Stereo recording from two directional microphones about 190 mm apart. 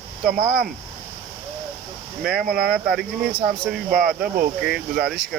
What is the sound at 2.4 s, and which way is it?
Speech, 50° right (ahead or behind).